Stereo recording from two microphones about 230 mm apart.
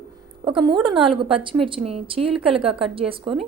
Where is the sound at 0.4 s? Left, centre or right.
Right.